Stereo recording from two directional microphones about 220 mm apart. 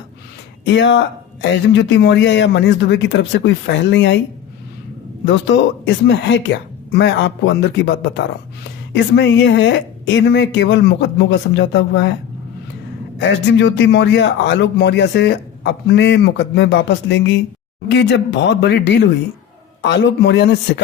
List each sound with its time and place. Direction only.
0.6 s speech: 55° left (ahead or behind)
5.2 s a man's voice: 55° left (ahead or behind)
13.1 s a man's voice: 55° left (ahead or behind)